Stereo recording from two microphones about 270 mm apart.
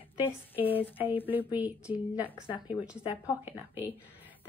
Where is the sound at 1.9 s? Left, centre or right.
Centre.